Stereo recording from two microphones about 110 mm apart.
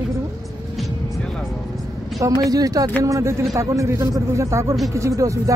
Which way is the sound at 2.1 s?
30° right (ahead or behind).